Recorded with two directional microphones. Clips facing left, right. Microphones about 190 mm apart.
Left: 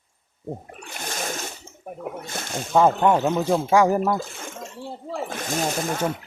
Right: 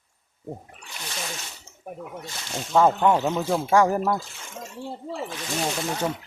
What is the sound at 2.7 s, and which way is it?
Speech, 10° left (ahead or behind).